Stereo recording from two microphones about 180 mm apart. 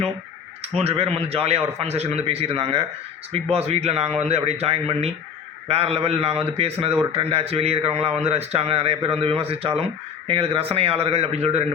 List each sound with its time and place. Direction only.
0.6 s a man's voice: 35° right (ahead or behind)